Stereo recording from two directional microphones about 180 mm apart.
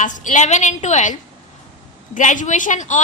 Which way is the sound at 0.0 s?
45° left (ahead or behind).